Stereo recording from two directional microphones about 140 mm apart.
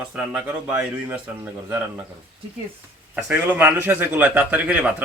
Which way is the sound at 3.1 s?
10° right (ahead or behind).